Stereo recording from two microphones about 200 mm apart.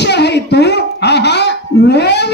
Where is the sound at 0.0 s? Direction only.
55° left (ahead or behind).